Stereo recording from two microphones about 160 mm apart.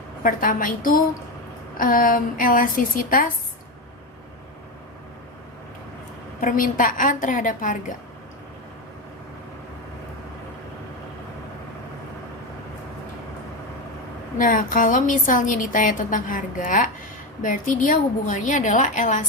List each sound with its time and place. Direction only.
0.2 s a woman's voice: 60° left (ahead or behind)
6.4 s a woman's voice: 55° left (ahead or behind)
14.3 s a woman's voice: 55° left (ahead or behind)